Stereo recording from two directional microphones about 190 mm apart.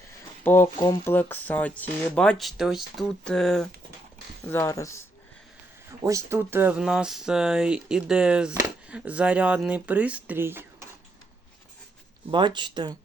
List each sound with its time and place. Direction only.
0.4 s speech: 15° left (ahead or behind)
4.5 s speech: 15° left (ahead or behind)
6.0 s speech: 15° right (ahead or behind)
12.3 s speech: 25° right (ahead or behind)